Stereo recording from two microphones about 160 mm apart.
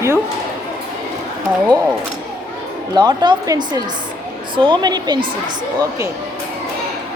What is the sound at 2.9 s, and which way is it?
Speech, 25° right (ahead or behind).